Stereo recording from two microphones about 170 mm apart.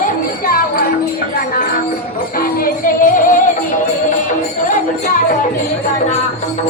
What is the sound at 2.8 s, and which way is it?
Music, 50° left (ahead or behind).